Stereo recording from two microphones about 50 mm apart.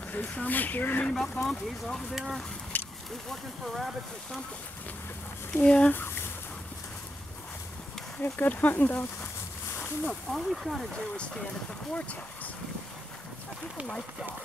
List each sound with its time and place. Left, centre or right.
0.1 s speech: left
1.1 s speech: centre
2.1 s speech: centre
2.7 s a sound: left
3.3 s speech: centre
5.6 s speech: left
8.2 s speech: left
10.0 s speech: centre